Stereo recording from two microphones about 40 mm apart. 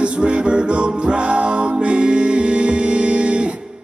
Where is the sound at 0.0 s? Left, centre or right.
Right.